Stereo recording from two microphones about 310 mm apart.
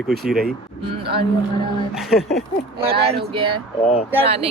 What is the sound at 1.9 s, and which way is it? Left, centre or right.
Speech, centre.